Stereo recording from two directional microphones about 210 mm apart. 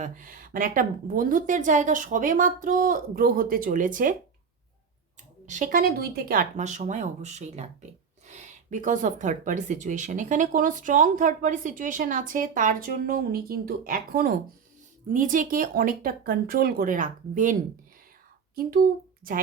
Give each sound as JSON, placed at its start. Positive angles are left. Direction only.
{"t": 0.0, "sound": "speech", "side_deg": -40}
{"t": 5.5, "sound": "speech", "side_deg": -40}